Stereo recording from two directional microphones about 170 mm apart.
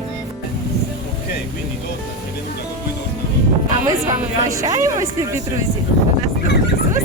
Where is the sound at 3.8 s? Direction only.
20° right (ahead or behind).